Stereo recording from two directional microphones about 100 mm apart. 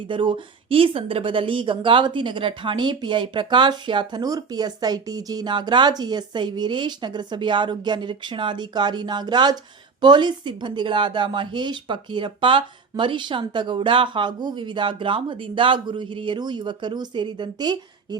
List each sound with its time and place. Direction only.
0.1 s speech: 55° right (ahead or behind)